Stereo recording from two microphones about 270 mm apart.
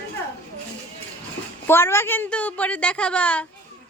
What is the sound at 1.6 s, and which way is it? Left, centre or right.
A woman's voice, centre.